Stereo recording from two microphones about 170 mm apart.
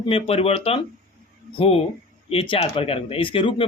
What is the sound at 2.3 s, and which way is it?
Speech, 35° left (ahead or behind).